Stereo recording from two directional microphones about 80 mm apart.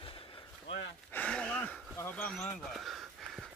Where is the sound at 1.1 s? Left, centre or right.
Centre.